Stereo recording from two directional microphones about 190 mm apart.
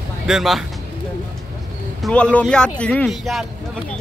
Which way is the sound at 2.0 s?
5° left (ahead or behind).